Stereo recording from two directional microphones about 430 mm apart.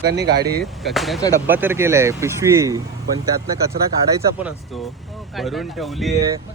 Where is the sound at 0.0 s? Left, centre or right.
Right.